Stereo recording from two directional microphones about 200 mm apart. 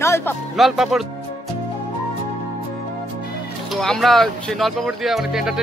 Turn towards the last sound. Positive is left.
turn(degrees=0)  # may be behind; listen again after turning